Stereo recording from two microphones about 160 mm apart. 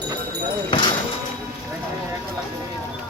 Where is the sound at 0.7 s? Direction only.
35° left (ahead or behind).